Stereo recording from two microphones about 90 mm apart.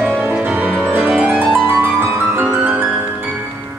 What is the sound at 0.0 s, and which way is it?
Music, 15° right (ahead or behind).